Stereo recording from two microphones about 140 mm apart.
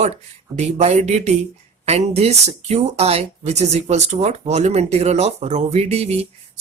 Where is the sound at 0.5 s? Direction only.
50° right (ahead or behind).